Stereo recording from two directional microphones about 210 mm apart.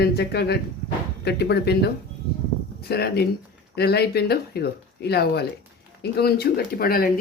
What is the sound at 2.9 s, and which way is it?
Speech, 50° left (ahead or behind).